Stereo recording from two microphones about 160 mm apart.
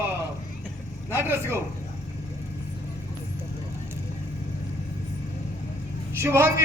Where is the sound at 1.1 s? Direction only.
15° right (ahead or behind).